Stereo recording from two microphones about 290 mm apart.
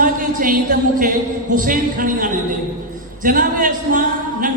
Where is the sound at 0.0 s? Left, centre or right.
Right.